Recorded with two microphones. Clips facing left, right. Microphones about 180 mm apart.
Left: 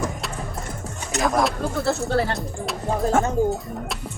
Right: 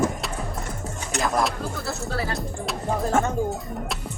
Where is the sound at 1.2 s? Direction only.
Centre (ahead or behind).